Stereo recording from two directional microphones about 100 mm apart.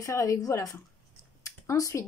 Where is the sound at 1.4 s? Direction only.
30° left (ahead or behind).